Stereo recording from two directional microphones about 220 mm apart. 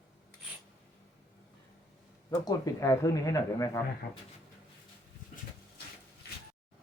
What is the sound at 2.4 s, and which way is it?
Speech, 15° left (ahead or behind).